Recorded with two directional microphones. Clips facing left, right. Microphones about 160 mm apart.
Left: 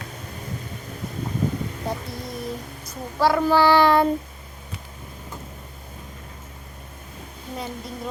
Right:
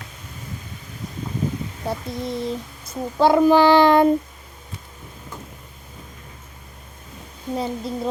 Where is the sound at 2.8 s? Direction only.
20° right (ahead or behind).